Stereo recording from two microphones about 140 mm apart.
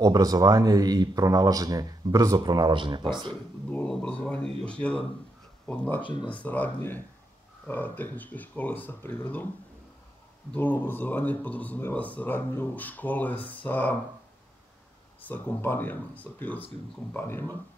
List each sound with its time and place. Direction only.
0.0 s speech: 25° right (ahead or behind)
3.7 s speech: 5° left (ahead or behind)
6.0 s speech: 35° left (ahead or behind)
6.4 s speech: 10° left (ahead or behind)
10.5 s speech: 10° left (ahead or behind)
15.2 s speech: 15° left (ahead or behind)